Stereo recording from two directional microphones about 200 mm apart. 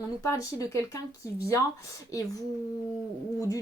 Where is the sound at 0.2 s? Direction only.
15° left (ahead or behind).